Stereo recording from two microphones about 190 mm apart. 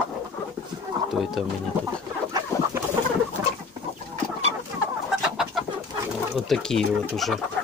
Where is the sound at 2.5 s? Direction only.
15° left (ahead or behind).